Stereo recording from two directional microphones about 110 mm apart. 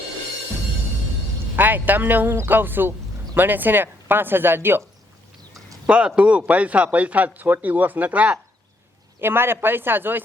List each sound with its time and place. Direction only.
1.5 s speech: 15° right (ahead or behind)
5.9 s speech: 10° right (ahead or behind)